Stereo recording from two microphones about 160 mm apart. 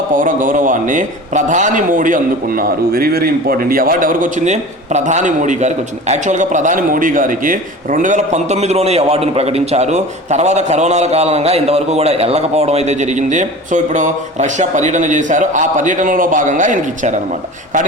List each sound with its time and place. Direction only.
0.1 s a man's voice: 55° right (ahead or behind)